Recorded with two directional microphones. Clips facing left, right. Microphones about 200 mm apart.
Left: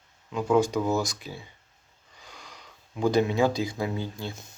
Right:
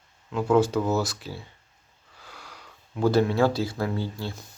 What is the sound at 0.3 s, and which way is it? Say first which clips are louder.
Speech: right 2 dB; centre (ahead or behind).